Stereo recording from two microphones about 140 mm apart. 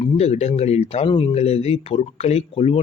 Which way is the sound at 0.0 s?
45° left (ahead or behind).